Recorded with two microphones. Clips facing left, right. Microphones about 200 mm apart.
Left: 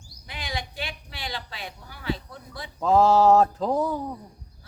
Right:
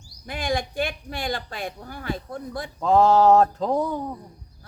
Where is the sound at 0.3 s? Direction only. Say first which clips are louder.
Right 8 dB; 50° right (ahead or behind).